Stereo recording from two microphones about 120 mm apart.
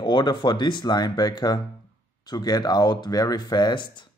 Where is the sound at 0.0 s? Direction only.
40° left (ahead or behind).